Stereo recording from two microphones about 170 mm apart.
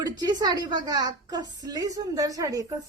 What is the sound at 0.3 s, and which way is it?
A woman's voice, 25° right (ahead or behind).